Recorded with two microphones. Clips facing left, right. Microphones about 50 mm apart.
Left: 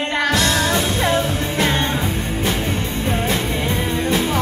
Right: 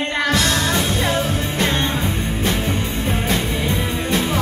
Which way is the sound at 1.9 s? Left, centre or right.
Centre.